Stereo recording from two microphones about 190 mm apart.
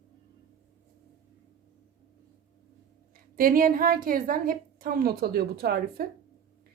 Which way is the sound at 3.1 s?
50° right (ahead or behind).